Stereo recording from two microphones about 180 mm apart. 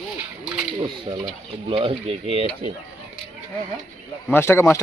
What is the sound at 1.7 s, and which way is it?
Speech, 30° right (ahead or behind).